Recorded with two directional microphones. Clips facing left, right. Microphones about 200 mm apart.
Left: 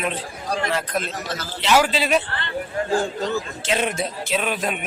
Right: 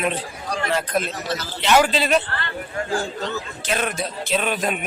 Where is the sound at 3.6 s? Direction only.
25° left (ahead or behind).